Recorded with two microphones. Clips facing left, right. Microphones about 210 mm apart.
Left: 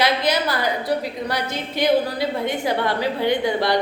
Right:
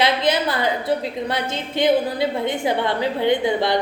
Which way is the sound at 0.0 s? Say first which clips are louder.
Right 1 dB; 25° right (ahead or behind).